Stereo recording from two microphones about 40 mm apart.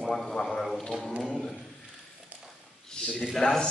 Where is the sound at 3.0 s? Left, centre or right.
Left.